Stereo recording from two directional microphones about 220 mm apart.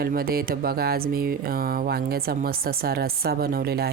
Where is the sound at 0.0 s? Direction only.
40° right (ahead or behind).